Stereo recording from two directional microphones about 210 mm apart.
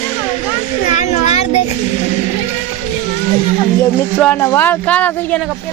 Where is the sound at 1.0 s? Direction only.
30° left (ahead or behind).